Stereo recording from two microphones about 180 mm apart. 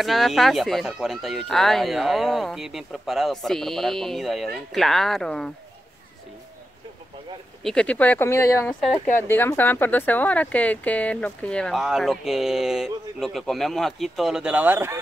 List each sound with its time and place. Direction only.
0.0 s speech: centre (ahead or behind)
7.6 s speech: 5° left (ahead or behind); by 15.0 s 10° right (ahead or behind)